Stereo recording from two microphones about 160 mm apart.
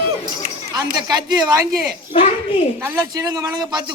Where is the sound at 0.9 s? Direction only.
25° right (ahead or behind).